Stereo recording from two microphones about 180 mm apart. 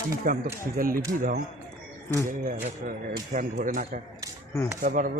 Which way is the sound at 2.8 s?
50° right (ahead or behind).